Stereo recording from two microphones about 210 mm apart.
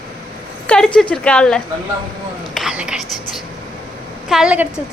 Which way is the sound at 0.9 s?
5° left (ahead or behind).